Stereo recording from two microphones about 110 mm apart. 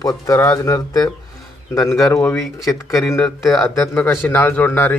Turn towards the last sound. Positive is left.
turn(degrees=20)  # may be behind; listen again after turning